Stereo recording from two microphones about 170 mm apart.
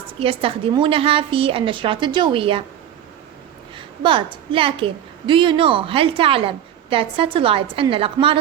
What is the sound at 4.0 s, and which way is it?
A woman's voice, 30° right (ahead or behind).